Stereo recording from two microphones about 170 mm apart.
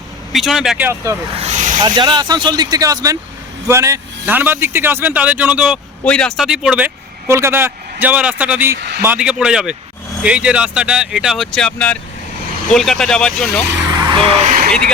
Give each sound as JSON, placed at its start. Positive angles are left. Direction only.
{"t": 0.3, "sound": "speech", "side_deg": 0}
{"t": 1.4, "sound": "vehicle", "side_deg": -45}
{"t": 1.8, "sound": "speech", "side_deg": -25}
{"t": 6.1, "sound": "speech", "side_deg": 5}
{"t": 8.7, "sound": "a man's voice", "side_deg": -80}
{"t": 9.0, "sound": "speech", "side_deg": -10}
{"t": 14.1, "sound": "speech", "side_deg": -30}
{"t": 14.4, "sound": "a sound", "side_deg": -50}
{"t": 14.7, "sound": "speech", "side_deg": 5}